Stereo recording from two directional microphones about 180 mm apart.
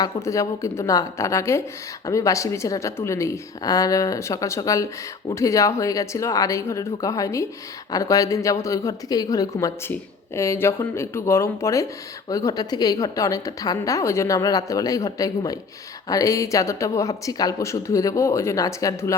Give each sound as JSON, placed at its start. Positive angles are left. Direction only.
{"t": 0.0, "sound": "a woman's voice", "side_deg": 15}